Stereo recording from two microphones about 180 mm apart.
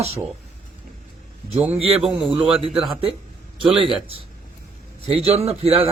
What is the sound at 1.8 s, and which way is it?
A man's voice, 35° right (ahead or behind).